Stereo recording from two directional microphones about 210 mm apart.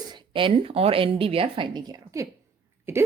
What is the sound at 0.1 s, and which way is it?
Speech, 25° right (ahead or behind).